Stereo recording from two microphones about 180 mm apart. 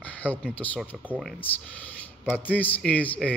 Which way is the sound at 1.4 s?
10° left (ahead or behind).